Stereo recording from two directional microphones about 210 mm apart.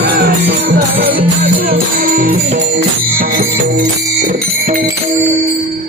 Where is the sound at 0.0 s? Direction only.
50° right (ahead or behind).